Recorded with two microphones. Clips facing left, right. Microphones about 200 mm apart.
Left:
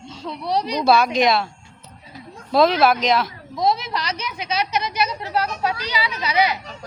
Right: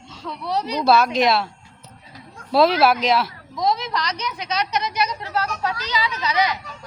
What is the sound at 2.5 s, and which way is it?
Speech, 5° right (ahead or behind).